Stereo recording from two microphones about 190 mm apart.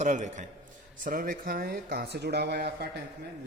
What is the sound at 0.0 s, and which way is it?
A man's voice, 40° right (ahead or behind).